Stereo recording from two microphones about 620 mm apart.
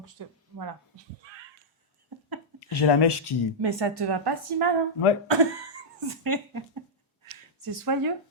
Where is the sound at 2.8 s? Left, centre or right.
Left.